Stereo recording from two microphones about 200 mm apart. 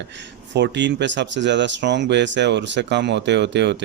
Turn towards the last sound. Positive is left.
turn(degrees=-60)  # may be behind; listen again after turning